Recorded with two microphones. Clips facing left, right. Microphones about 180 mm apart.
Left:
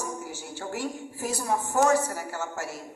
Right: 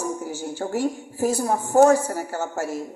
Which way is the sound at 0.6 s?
40° right (ahead or behind).